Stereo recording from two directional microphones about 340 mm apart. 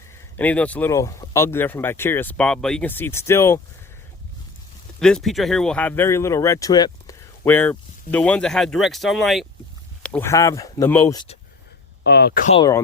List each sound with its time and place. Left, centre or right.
0.3 s speech: centre
4.9 s speech: centre
12.0 s speech: left; by 12.8 s centre